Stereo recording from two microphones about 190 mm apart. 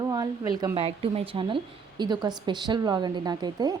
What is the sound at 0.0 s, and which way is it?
A woman's voice, 20° right (ahead or behind).